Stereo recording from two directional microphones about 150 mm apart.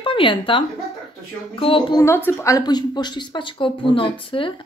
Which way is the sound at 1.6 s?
35° left (ahead or behind).